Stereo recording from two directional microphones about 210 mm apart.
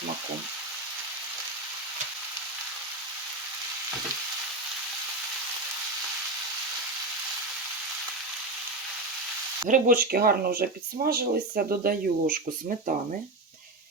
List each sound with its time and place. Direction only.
9.6 s speech: 40° right (ahead or behind)